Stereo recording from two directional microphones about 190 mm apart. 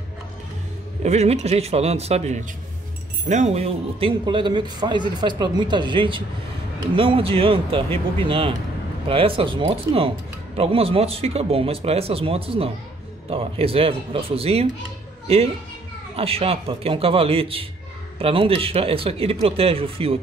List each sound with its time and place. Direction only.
1.0 s speech: 35° right (ahead or behind)